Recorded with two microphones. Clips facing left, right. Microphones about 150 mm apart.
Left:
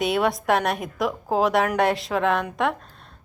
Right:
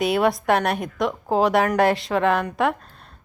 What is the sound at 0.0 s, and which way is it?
Speech, centre (ahead or behind).